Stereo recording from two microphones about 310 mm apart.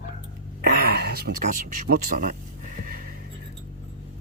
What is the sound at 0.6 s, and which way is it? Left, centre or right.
Speech, right.